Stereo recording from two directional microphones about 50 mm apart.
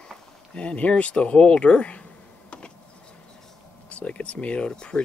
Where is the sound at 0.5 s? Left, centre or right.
Left.